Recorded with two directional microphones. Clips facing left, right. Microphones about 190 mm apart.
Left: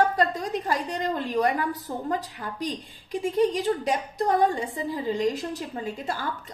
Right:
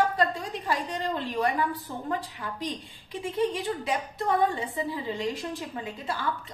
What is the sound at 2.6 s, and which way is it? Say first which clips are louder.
A woman's voice: left 5 dB; 45° left (ahead or behind).